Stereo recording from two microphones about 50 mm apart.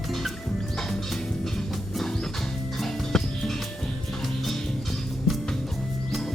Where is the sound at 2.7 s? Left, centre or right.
Centre.